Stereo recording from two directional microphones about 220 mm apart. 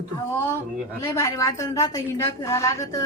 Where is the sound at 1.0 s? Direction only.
15° left (ahead or behind).